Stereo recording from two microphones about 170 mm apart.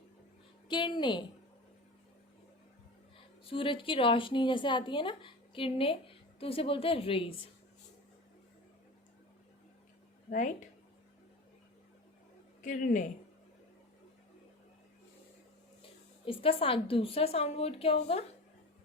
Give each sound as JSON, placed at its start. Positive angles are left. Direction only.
{"t": 0.7, "sound": "a woman's voice", "side_deg": 30}
{"t": 3.4, "sound": "a woman's voice", "side_deg": 30}
{"t": 10.2, "sound": "speech", "side_deg": 45}
{"t": 12.6, "sound": "speech", "side_deg": 50}
{"t": 16.2, "sound": "a woman's voice", "side_deg": 30}